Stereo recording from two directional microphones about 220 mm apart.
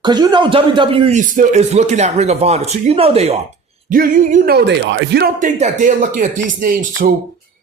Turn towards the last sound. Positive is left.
turn(degrees=-40)  # may be behind; listen again after turning